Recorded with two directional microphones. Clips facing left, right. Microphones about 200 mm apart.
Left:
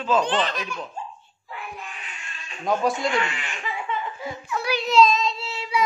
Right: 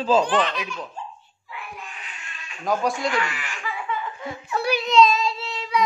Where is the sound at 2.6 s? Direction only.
Centre (ahead or behind).